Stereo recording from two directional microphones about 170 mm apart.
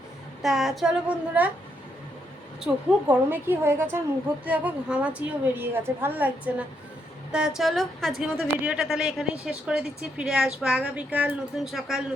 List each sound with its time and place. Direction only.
0.4 s speech: centre (ahead or behind)
2.6 s a woman's voice: 10° right (ahead or behind)